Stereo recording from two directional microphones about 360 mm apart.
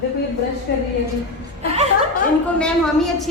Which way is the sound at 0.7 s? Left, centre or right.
Left.